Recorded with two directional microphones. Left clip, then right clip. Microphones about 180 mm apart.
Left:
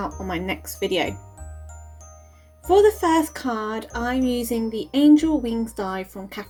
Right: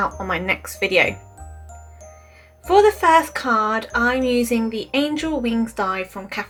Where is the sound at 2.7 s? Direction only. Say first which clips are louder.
Right 3 dB; 45° left (ahead or behind).